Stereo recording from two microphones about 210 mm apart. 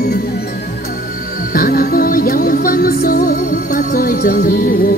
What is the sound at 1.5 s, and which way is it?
Music, 45° left (ahead or behind).